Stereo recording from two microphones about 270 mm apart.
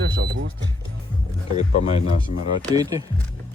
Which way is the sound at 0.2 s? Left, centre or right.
Right.